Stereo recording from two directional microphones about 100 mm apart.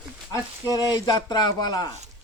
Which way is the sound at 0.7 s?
40° left (ahead or behind).